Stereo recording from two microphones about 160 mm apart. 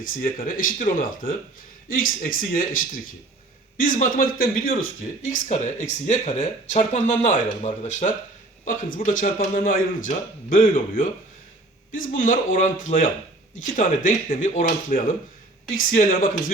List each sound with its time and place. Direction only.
0.0 s a man's voice: 60° left (ahead or behind)
3.8 s a man's voice: 60° left (ahead or behind)
5.2 s a man's voice: 50° left (ahead or behind)